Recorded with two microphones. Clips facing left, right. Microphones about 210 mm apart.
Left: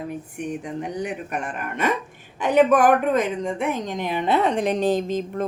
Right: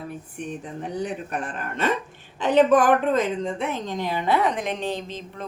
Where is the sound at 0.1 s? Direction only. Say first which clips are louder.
Left 4 dB; 15° left (ahead or behind).